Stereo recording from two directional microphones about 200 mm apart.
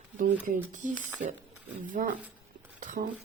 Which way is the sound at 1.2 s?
40° right (ahead or behind).